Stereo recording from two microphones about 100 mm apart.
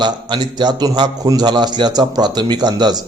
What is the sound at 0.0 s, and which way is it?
A man's voice, 50° right (ahead or behind).